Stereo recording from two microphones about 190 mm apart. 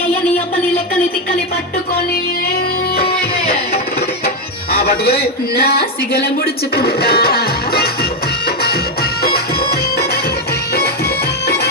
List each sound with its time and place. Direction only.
4.7 s music: 55° left (ahead or behind)
6.7 s music: 55° left (ahead or behind)